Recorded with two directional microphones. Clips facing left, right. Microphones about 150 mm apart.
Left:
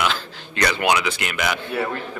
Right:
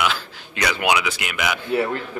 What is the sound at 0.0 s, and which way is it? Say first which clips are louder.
A man's voice: even; 10° right (ahead or behind).